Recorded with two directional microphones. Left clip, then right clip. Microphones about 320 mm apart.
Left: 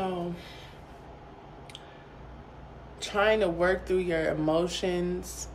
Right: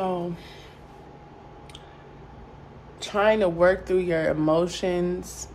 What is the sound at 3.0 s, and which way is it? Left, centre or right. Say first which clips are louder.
Speech: right 4 dB; centre.